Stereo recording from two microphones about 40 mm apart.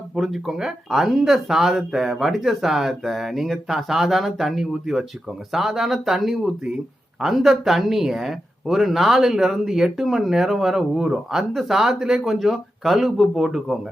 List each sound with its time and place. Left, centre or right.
0.2 s speech: centre